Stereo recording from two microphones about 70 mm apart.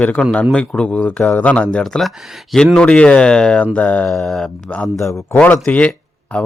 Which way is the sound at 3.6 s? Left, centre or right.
Left.